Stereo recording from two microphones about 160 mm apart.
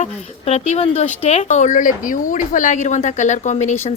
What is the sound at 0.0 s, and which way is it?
Speech, 45° left (ahead or behind).